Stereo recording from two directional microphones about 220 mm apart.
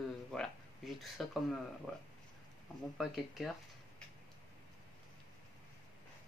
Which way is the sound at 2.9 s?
Centre (ahead or behind).